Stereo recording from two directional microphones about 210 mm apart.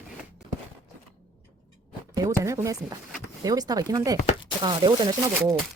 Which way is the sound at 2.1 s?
15° right (ahead or behind).